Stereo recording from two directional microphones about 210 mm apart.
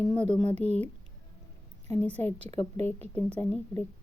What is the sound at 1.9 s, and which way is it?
Speech, 5° left (ahead or behind).